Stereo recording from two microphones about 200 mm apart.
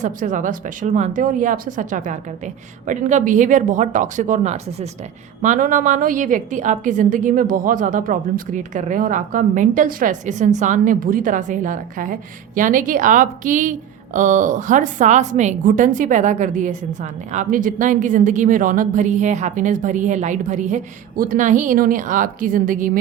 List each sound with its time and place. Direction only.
0.0 s a woman's voice: 40° right (ahead or behind)